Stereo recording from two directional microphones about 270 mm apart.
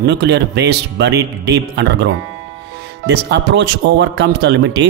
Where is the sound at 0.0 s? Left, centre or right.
Right.